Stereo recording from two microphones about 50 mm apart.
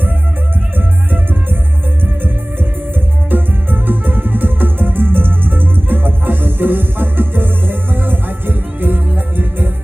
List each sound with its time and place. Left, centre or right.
0.8 s music: right
3.2 s music: right